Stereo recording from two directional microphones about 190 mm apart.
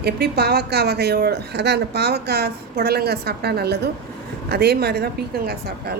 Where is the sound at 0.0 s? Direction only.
55° right (ahead or behind).